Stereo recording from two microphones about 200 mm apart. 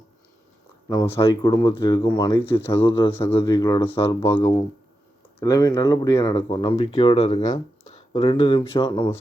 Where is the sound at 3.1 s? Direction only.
10° left (ahead or behind).